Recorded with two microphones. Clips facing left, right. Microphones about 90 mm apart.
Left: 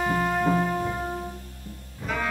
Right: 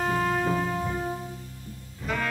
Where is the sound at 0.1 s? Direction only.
5° left (ahead or behind).